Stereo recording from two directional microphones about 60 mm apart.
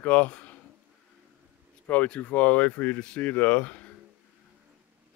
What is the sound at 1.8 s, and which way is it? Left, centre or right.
Speech, left.